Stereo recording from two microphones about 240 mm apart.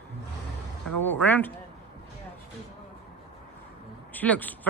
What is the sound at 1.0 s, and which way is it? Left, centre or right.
Speech, centre.